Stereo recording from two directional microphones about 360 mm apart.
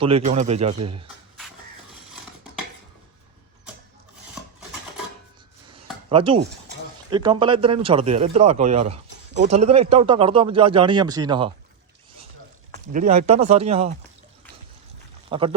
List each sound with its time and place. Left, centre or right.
0.0 s a man's voice: centre
5.7 s a sound: centre
7.1 s a man's voice: centre
12.9 s a man's voice: right
15.3 s speech: centre